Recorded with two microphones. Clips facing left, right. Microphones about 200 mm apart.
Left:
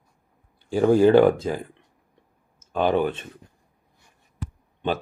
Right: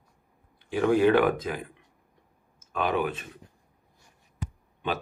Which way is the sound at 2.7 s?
30° left (ahead or behind).